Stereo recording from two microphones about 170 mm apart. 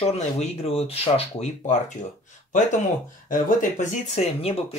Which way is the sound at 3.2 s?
50° left (ahead or behind).